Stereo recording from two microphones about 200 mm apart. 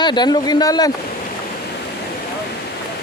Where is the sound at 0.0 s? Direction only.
20° left (ahead or behind).